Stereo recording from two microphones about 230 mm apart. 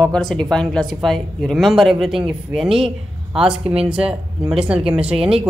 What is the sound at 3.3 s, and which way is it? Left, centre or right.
Speech, centre.